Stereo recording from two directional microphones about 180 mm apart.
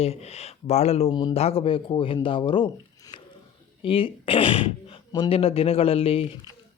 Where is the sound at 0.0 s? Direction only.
35° left (ahead or behind).